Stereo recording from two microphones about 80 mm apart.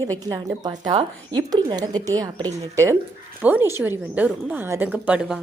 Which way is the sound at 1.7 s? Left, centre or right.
Right.